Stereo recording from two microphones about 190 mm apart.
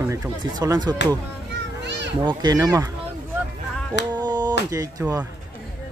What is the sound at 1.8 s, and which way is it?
Children playing, 65° right (ahead or behind).